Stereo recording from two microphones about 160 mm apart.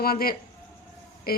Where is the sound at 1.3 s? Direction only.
70° left (ahead or behind).